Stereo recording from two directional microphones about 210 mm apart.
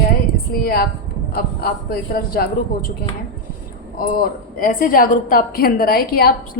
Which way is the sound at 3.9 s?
45° left (ahead or behind).